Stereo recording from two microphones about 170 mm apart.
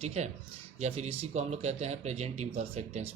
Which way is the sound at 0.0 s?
40° right (ahead or behind).